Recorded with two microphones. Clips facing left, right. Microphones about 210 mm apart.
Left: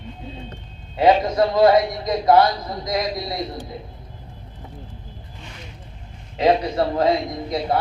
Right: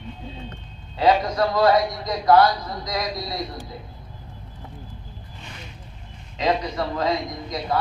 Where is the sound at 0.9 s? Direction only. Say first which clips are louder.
Left 3 dB; 25° left (ahead or behind).